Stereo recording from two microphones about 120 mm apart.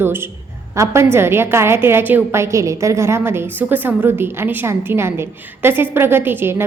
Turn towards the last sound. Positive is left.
turn(degrees=-20)  # may be behind; listen again after turning